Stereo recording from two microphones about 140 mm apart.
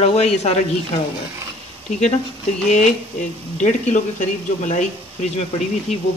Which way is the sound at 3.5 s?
60° left (ahead or behind).